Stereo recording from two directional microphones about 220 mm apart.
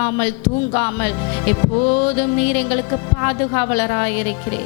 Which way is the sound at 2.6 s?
15° left (ahead or behind).